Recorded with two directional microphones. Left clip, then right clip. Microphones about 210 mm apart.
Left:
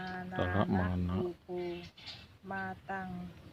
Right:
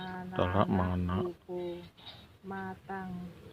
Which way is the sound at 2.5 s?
35° left (ahead or behind).